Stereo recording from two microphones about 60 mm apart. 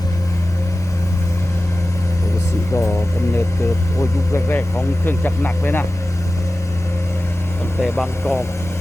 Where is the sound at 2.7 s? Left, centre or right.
Left.